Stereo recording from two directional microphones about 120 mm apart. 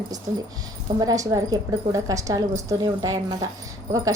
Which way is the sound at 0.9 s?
30° right (ahead or behind).